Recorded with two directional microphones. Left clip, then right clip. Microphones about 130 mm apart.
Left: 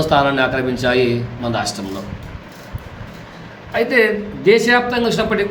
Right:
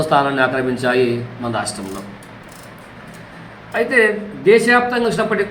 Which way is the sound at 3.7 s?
15° left (ahead or behind).